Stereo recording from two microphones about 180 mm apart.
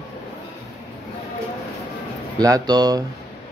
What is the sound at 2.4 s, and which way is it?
Speech, 20° right (ahead or behind).